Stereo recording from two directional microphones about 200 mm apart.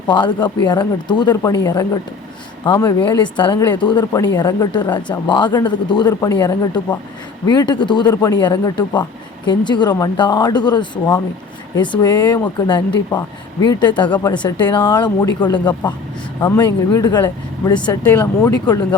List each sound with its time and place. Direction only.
0.1 s speech: 20° left (ahead or behind)
14.1 s speech: 5° left (ahead or behind)
14.7 s speech: 20° left (ahead or behind)